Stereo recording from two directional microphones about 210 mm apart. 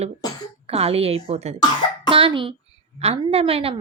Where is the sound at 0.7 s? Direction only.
30° right (ahead or behind).